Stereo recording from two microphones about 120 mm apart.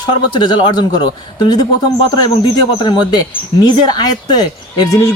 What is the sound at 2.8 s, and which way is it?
Speech, 40° left (ahead or behind).